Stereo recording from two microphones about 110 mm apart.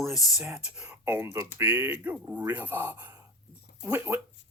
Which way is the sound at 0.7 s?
10° right (ahead or behind).